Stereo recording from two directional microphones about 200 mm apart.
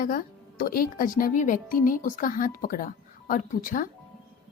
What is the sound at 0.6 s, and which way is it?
Speech, 45° left (ahead or behind).